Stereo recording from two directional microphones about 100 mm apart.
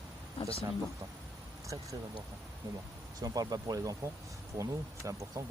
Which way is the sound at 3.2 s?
35° right (ahead or behind).